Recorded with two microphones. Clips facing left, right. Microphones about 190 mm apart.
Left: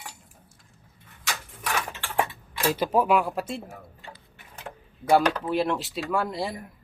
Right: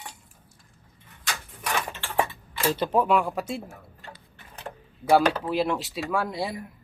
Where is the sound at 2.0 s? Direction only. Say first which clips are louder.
Right 1 dB; 5° left (ahead or behind).